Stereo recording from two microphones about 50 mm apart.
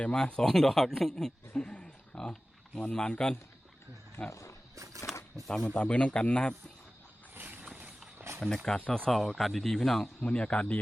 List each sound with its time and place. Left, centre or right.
0.0 s speech: left
1.6 s a sound: left
2.1 s pig: centre
2.9 s speech: centre
4.3 s speech: left
5.5 s speech: centre
5.7 s a man's voice: left
7.3 s a sound: right
7.6 s a sound: right
8.4 s speech: centre
10.2 s a man's voice: left